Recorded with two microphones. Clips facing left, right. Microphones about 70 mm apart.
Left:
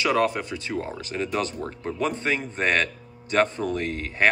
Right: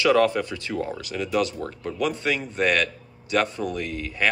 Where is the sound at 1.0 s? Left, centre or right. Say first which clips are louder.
Right 3 dB; left.